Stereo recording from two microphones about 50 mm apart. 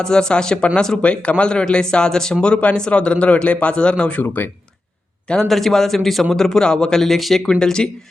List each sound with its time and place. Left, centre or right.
0.0 s speech: centre
4.0 s speech: left
5.5 s speech: centre
7.6 s speech: centre